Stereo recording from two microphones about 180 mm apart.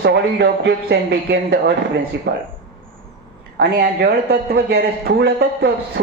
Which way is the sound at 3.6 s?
60° right (ahead or behind).